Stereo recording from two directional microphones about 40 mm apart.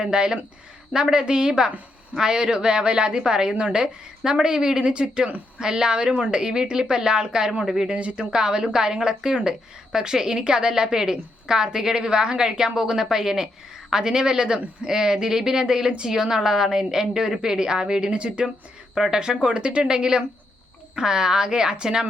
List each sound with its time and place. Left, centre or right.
0.0 s a woman's voice: right
7.9 s a woman's voice: right
18.9 s a woman's voice: centre